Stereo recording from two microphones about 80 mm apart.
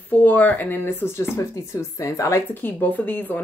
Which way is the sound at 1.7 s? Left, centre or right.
Left.